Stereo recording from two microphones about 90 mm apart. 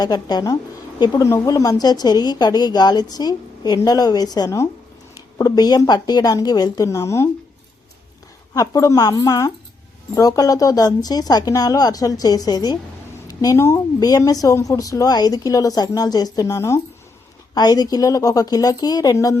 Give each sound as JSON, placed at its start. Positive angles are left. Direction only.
{"t": 0.0, "sound": "speech", "side_deg": 50}
{"t": 1.2, "sound": "speech", "side_deg": 35}
{"t": 6.8, "sound": "a woman's voice", "side_deg": 35}
{"t": 8.5, "sound": "a woman's voice", "side_deg": 40}
{"t": 17.5, "sound": "speech", "side_deg": 50}
{"t": 19.1, "sound": "a woman's voice", "side_deg": 35}